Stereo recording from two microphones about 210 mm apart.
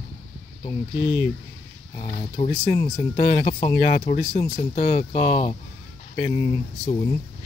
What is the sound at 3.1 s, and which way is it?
Speech, 45° left (ahead or behind).